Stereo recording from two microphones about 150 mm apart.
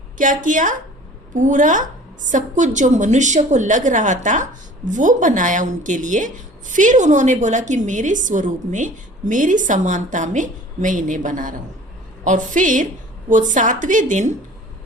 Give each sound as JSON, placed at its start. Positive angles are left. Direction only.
{"t": 0.2, "sound": "speech", "side_deg": -60}